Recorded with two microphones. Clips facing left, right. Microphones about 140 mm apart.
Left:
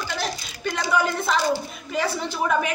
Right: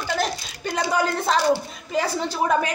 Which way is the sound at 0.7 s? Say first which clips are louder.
Right 1 dB; 40° right (ahead or behind).